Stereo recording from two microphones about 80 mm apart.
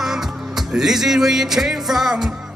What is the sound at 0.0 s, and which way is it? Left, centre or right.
Music, centre.